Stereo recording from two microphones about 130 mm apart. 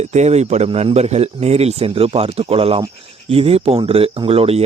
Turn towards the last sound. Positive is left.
turn(degrees=-50)  # may be behind; listen again after turning